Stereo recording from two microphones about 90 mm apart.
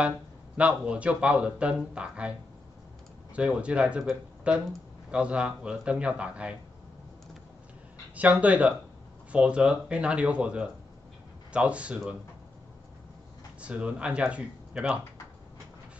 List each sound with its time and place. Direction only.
0.6 s speech: 15° right (ahead or behind)
3.3 s speech: 15° right (ahead or behind)
8.2 s speech: 15° right (ahead or behind)
13.6 s speech: 15° right (ahead or behind)